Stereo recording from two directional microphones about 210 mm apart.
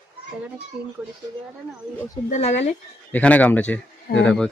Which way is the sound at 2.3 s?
30° left (ahead or behind).